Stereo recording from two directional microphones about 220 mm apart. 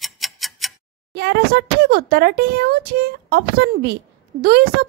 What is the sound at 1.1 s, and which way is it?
Speech, 50° right (ahead or behind).